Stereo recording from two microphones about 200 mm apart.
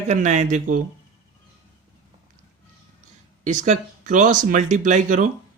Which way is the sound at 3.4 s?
40° right (ahead or behind).